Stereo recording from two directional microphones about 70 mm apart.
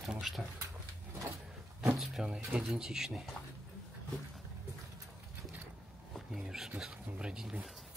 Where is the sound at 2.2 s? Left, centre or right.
Centre.